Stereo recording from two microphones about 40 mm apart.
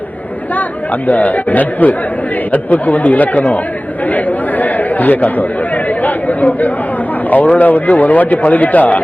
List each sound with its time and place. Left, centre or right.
1.0 s speech: left
4.1 s chatter: left
7.3 s speech: left